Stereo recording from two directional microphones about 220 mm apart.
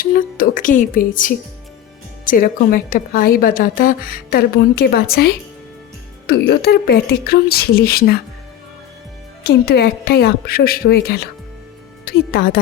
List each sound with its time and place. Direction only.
0.0 s music: 40° left (ahead or behind)
2.2 s a woman's voice: 40° left (ahead or behind)
9.4 s a woman's voice: 45° left (ahead or behind)